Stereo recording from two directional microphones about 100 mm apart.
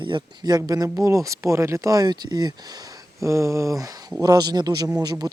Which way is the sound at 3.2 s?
30° right (ahead or behind).